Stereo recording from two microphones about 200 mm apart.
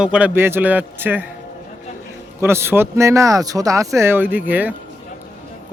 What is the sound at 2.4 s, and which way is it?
Speech, 10° right (ahead or behind).